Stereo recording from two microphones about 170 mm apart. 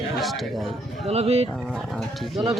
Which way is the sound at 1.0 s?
35° right (ahead or behind).